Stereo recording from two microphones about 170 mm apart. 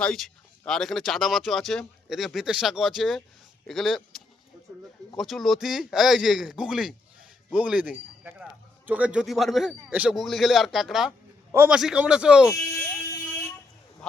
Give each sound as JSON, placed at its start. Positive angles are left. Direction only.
{"t": 0.0, "sound": "a man's voice", "side_deg": 5}
{"t": 12.5, "sound": "buzzer", "side_deg": 15}